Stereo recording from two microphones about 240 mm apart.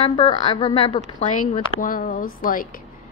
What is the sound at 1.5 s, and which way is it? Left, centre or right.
Speech, left.